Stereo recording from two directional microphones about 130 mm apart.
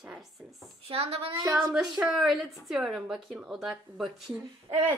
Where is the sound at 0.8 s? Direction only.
50° right (ahead or behind).